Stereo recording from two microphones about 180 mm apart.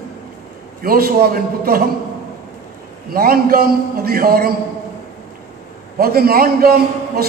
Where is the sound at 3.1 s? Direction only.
55° right (ahead or behind).